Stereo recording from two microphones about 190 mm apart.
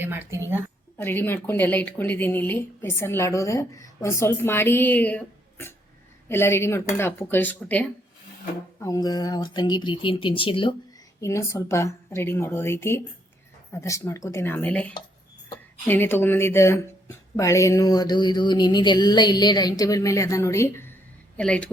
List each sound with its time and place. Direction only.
0.0 s speech: 10° right (ahead or behind)
0.9 s speech: 10° left (ahead or behind)
8.8 s a sound: 20° left (ahead or behind)
11.2 s speech: 15° left (ahead or behind)
17.3 s a sound: 15° left (ahead or behind)
21.3 s speech: 5° left (ahead or behind)